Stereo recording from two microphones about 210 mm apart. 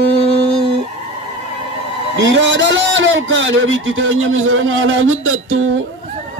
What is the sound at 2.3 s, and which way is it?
A man's voice, 60° right (ahead or behind).